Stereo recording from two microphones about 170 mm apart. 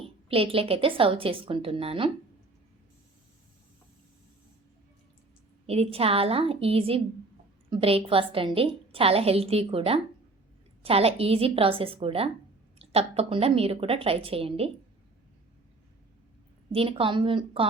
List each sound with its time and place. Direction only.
0.3 s a woman's voice: 35° right (ahead or behind)
5.6 s a woman's voice: 35° right (ahead or behind)
16.7 s a woman's voice: 30° right (ahead or behind)